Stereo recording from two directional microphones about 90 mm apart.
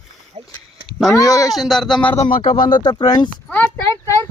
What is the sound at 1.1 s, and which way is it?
Speech, 40° left (ahead or behind).